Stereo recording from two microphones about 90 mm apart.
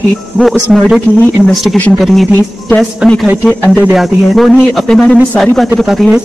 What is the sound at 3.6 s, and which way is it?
Speech, 20° left (ahead or behind).